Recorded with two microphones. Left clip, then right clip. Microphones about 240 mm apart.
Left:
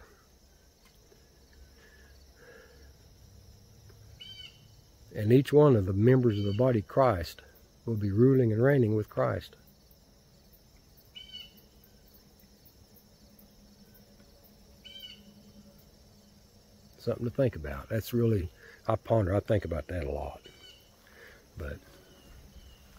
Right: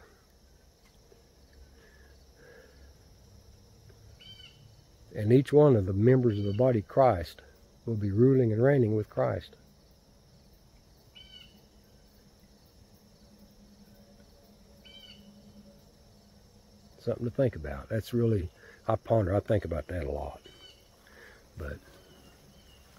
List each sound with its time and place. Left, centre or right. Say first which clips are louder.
5.1 s speech: even; centre
17.0 s speech: even; centre